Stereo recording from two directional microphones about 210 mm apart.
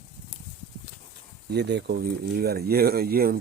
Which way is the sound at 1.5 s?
50° right (ahead or behind).